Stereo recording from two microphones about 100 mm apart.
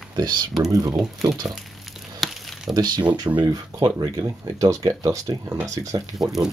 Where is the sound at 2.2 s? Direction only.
5° left (ahead or behind).